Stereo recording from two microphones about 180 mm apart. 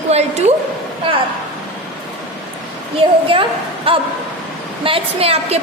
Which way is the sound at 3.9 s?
30° right (ahead or behind).